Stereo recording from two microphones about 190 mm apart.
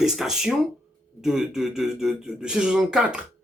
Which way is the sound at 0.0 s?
Centre (ahead or behind).